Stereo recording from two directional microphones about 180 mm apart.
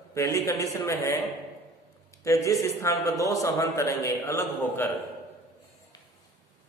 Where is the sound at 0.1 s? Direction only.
15° left (ahead or behind).